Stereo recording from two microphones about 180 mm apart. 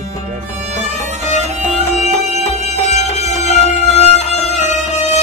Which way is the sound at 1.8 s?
40° left (ahead or behind).